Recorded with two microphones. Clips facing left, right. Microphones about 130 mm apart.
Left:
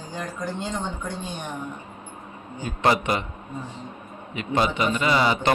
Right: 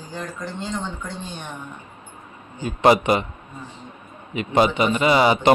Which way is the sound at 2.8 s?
15° right (ahead or behind).